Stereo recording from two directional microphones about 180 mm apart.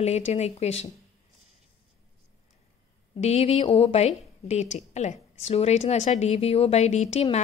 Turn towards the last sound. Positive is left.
turn(degrees=40)  # may be behind; listen again after turning